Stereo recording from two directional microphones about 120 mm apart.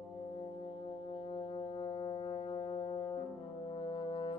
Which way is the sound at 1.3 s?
40° left (ahead or behind).